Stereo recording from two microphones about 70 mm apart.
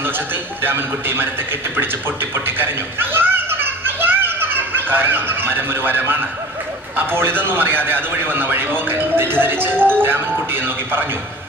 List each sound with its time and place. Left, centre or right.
0.6 s a man's voice: right